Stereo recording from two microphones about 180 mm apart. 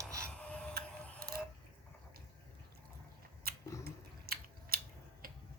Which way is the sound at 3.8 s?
60° right (ahead or behind).